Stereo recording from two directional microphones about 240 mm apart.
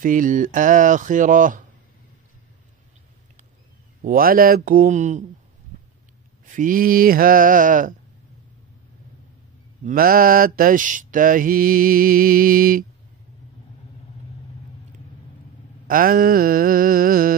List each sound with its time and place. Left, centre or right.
0.0 s mantra: right
4.0 s mantra: right
6.4 s mantra: right
9.8 s mantra: right
15.9 s mantra: right